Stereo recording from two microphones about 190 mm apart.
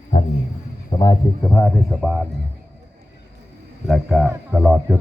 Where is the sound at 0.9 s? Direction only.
20° left (ahead or behind).